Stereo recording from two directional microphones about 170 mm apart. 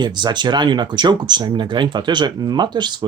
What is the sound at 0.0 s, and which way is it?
Speech, 25° right (ahead or behind).